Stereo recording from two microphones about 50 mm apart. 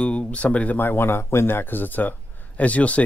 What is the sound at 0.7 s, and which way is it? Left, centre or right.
Speech, left.